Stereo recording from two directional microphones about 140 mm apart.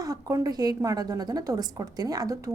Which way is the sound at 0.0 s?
25° right (ahead or behind).